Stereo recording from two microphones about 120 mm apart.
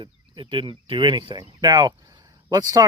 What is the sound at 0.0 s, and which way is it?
Speech, 40° right (ahead or behind).